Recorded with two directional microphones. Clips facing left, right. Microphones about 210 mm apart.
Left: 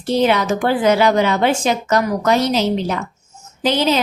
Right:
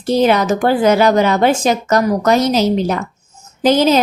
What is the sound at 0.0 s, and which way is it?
Speech, 40° right (ahead or behind).